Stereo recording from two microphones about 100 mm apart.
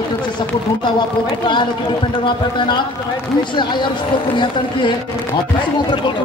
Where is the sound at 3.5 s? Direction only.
50° left (ahead or behind).